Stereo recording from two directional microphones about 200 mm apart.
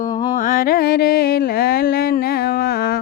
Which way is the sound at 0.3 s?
45° left (ahead or behind).